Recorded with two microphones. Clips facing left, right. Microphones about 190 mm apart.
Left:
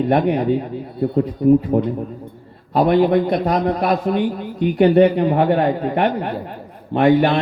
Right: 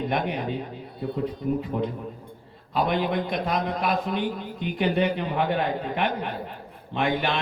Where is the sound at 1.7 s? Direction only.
60° left (ahead or behind).